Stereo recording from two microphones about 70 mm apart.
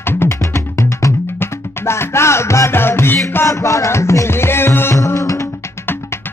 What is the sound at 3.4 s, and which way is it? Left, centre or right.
Music, left.